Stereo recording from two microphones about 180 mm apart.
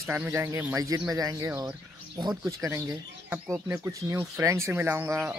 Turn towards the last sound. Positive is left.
turn(degrees=-10)  # may be behind; listen again after turning